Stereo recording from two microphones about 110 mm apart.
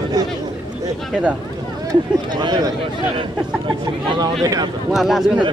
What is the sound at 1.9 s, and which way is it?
Speech, 40° right (ahead or behind).